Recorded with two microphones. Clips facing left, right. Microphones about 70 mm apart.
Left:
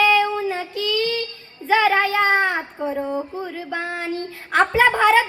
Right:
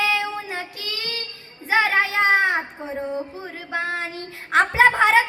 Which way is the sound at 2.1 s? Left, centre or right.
Right.